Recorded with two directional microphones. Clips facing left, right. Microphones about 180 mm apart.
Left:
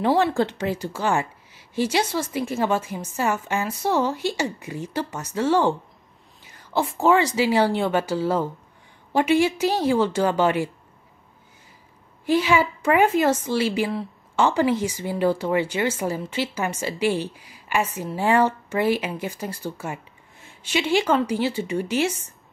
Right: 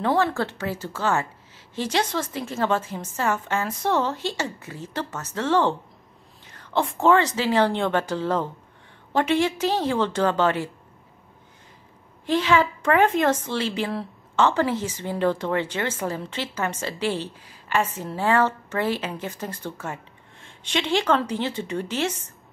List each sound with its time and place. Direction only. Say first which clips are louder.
0.0 s a woman's voice: left 3 dB; 20° left (ahead or behind)
12.3 s a woman's voice: left 1 dB; 10° left (ahead or behind)